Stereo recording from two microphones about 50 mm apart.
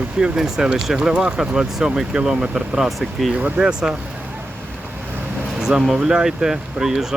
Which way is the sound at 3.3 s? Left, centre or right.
Right.